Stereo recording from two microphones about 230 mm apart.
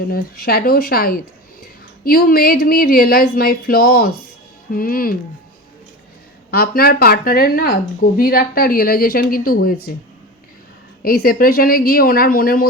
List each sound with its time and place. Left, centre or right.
0.1 s a woman's voice: left
6.5 s a woman's voice: left
11.0 s a woman's voice: left